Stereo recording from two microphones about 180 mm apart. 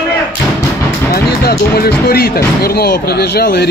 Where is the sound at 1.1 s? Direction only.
60° left (ahead or behind).